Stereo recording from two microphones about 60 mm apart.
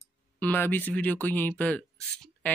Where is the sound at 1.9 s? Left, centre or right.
Centre.